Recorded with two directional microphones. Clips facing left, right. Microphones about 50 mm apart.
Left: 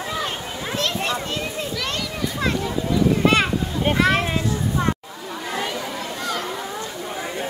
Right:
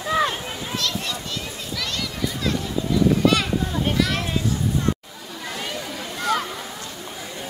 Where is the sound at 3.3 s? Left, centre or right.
Left.